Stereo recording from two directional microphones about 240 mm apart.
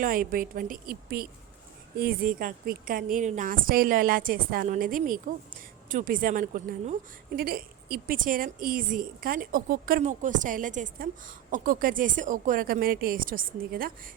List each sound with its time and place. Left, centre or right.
0.0 s a woman's voice: right